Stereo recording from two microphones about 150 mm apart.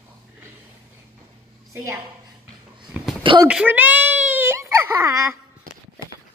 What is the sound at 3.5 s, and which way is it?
Baby cry, 10° right (ahead or behind).